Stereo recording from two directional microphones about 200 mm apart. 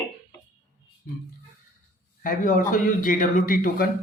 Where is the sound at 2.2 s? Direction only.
45° left (ahead or behind).